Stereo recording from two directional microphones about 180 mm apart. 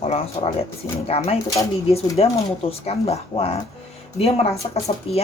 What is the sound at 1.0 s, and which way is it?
Speech, 35° left (ahead or behind).